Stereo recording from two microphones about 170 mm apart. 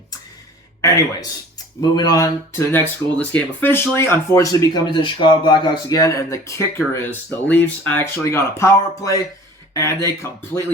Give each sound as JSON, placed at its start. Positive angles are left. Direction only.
{"t": 0.8, "sound": "speech", "side_deg": 20}